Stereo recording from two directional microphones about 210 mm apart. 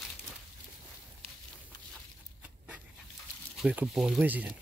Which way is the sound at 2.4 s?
5° right (ahead or behind).